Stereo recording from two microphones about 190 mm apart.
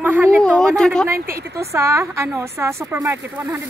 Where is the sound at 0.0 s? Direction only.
10° right (ahead or behind).